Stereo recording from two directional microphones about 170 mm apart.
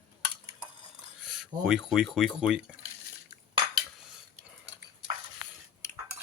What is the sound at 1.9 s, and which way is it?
Speech, centre (ahead or behind).